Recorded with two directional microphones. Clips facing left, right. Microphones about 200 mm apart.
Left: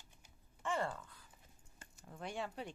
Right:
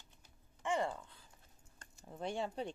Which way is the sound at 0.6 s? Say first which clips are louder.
Right 2 dB; 15° right (ahead or behind).